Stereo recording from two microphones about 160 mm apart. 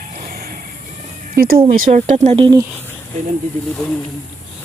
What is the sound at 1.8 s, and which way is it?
Speech, 55° right (ahead or behind).